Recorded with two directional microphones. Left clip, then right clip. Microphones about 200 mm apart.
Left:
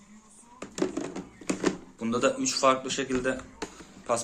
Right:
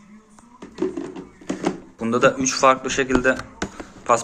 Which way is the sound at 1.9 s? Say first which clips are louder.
Right 11 dB; 15° right (ahead or behind).